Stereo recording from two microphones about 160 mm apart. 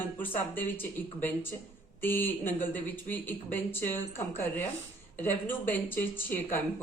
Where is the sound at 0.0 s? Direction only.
10° left (ahead or behind).